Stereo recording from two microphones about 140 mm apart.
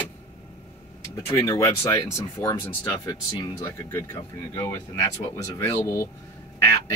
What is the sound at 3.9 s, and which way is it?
Speech, 20° left (ahead or behind).